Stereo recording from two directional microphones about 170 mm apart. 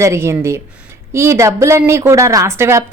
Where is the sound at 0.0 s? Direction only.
15° right (ahead or behind).